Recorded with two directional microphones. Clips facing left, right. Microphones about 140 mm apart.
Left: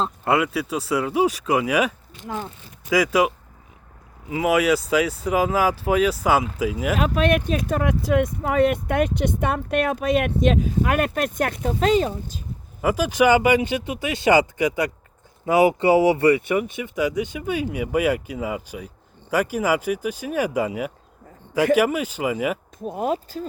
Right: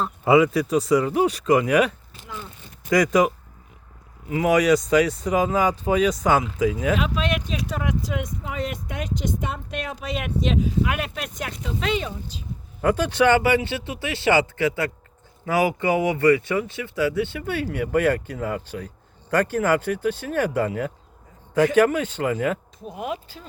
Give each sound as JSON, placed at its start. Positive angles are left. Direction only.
{"t": 0.3, "sound": "speech", "side_deg": 0}
{"t": 2.2, "sound": "speech", "side_deg": 50}
{"t": 2.9, "sound": "speech", "side_deg": 5}
{"t": 6.9, "sound": "speech", "side_deg": 50}
{"t": 12.8, "sound": "speech", "side_deg": 10}
{"t": 22.8, "sound": "speech", "side_deg": 40}